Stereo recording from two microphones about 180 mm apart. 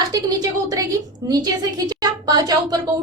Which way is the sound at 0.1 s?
20° right (ahead or behind).